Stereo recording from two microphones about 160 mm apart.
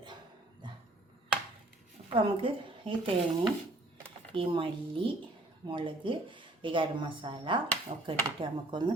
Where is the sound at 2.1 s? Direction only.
35° right (ahead or behind).